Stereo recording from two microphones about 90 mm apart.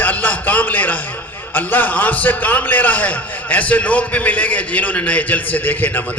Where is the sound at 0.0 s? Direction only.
20° left (ahead or behind).